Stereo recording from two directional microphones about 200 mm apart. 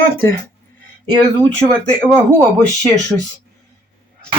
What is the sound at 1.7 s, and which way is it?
Speech, 10° right (ahead or behind).